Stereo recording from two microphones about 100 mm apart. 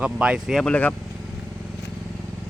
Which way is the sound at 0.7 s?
15° left (ahead or behind).